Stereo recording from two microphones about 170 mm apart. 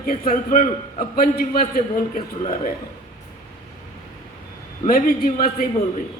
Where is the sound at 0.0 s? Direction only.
55° left (ahead or behind).